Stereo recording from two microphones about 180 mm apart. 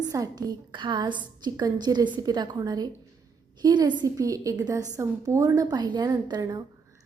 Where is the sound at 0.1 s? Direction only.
20° right (ahead or behind).